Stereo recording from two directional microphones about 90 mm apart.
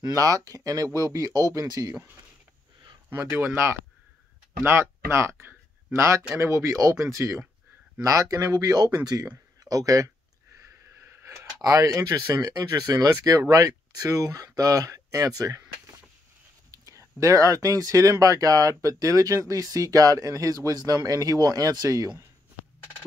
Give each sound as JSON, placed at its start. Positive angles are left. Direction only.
{"t": 0.0, "sound": "speech", "side_deg": -40}
{"t": 3.1, "sound": "speech", "side_deg": -25}
{"t": 11.6, "sound": "speech", "side_deg": -40}
{"t": 16.7, "sound": "speech", "side_deg": -40}